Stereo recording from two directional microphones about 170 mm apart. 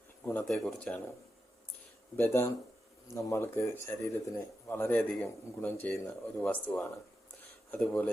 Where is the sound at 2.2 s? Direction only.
15° left (ahead or behind).